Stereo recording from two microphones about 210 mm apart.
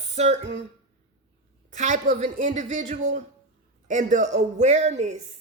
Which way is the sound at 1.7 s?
35° right (ahead or behind).